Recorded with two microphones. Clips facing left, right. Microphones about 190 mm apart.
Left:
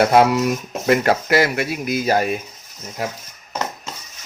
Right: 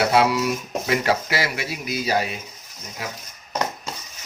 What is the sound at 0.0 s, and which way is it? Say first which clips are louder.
Speech: left 4 dB; 50° left (ahead or behind).